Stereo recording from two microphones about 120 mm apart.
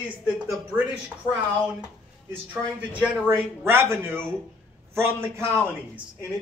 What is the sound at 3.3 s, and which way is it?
Speech, 20° right (ahead or behind).